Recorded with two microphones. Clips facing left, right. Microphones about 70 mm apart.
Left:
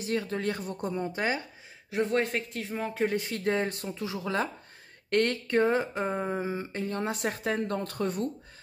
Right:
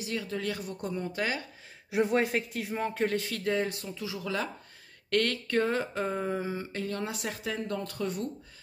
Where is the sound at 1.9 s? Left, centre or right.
Centre.